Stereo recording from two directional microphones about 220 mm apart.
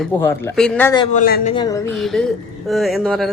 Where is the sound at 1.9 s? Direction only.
Centre (ahead or behind).